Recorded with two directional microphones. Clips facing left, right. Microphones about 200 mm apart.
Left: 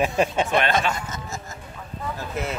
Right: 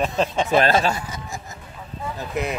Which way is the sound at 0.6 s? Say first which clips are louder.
Right 4 dB; 35° right (ahead or behind).